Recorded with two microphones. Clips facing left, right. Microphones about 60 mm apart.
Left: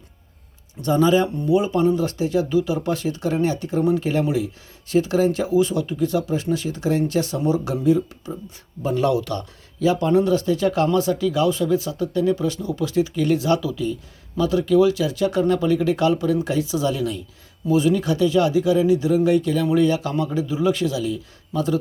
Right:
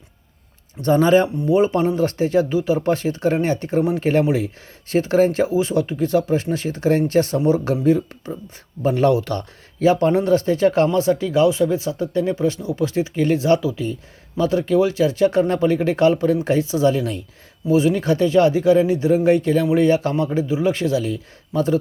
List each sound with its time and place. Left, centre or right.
0.8 s speech: right
17.7 s speech: right
17.9 s speech: right